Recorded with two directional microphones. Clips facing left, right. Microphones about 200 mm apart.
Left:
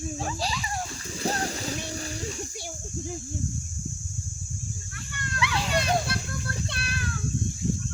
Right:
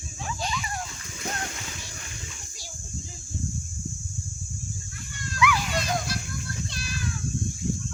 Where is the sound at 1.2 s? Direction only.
35° left (ahead or behind).